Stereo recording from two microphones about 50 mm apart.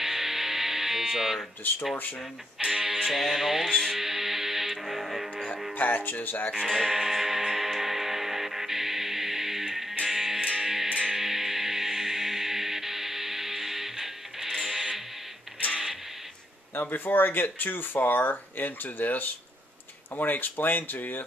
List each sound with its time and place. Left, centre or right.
0.0 s music: centre
2.6 s music: centre
5.8 s speech: left
6.5 s speech: centre
6.9 s music: centre
16.9 s speech: left